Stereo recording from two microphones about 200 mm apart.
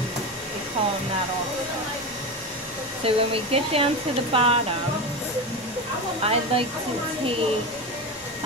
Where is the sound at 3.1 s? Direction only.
30° right (ahead or behind).